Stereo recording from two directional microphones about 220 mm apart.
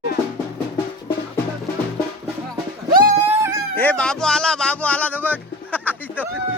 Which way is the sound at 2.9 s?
40° right (ahead or behind).